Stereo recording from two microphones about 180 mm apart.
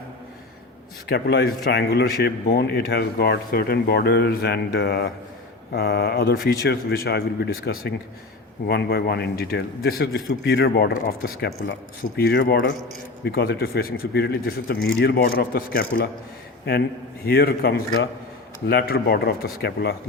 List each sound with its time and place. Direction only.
1.1 s speech: 70° left (ahead or behind)
17.2 s speech: 55° left (ahead or behind)